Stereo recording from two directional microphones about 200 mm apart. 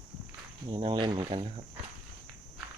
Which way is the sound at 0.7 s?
25° right (ahead or behind).